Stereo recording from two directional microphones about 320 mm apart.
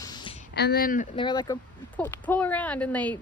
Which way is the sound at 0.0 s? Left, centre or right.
Centre.